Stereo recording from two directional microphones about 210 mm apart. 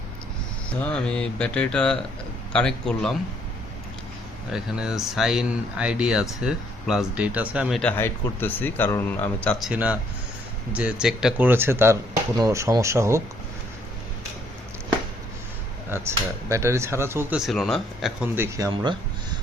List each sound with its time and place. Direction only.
0.8 s speech: 5° left (ahead or behind)
4.5 s speech: 5° right (ahead or behind)
15.9 s speech: 15° right (ahead or behind)
18.3 s speech: 15° right (ahead or behind)